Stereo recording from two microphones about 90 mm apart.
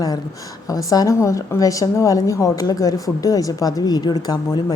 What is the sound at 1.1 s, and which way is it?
A woman's voice, 35° left (ahead or behind).